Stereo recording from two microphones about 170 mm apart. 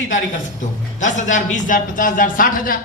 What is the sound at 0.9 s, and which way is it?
Speech, 45° left (ahead or behind).